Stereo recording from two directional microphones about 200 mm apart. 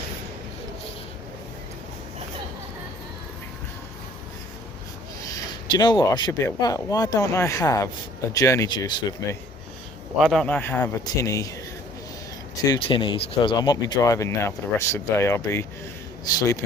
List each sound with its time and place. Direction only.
5.7 s speech: 20° left (ahead or behind)
10.2 s speech: centre (ahead or behind); by 11.5 s 15° left (ahead or behind)
12.6 s speech: 20° left (ahead or behind)